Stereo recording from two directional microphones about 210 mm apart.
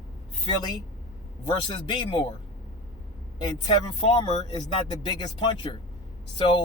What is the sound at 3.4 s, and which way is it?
Speech, 20° left (ahead or behind).